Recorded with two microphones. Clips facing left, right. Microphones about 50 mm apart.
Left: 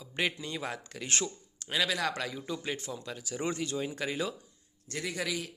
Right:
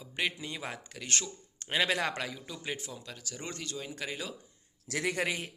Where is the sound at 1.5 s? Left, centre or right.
Right.